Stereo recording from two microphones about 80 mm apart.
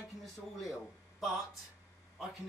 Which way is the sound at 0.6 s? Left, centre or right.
Centre.